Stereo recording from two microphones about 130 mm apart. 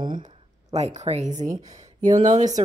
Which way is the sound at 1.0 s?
60° right (ahead or behind).